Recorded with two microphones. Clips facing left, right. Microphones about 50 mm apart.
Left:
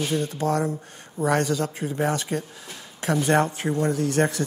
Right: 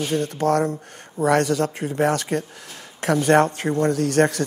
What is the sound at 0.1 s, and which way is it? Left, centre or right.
Speech, right.